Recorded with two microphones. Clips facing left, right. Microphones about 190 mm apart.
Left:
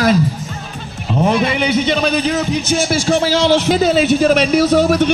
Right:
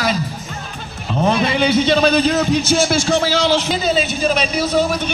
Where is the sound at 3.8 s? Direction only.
70° left (ahead or behind).